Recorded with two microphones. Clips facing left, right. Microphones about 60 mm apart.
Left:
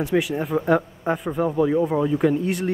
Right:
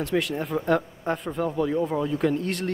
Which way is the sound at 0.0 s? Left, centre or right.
Centre.